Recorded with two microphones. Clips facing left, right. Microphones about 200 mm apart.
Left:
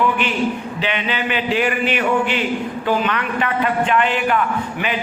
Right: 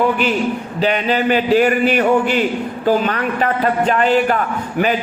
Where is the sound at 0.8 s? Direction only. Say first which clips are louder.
Right 10 dB; 40° right (ahead or behind).